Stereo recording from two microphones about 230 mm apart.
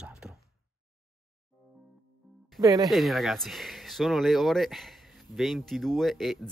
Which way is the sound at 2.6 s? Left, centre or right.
Centre.